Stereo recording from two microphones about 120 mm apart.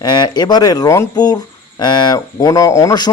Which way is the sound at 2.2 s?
30° left (ahead or behind).